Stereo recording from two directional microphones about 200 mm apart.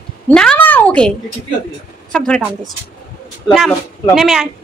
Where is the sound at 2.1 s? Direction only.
5° left (ahead or behind).